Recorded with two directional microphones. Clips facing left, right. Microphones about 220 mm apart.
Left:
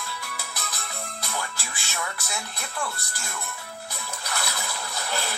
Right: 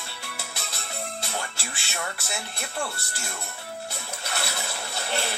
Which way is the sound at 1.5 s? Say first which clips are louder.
Even; 70° right (ahead or behind).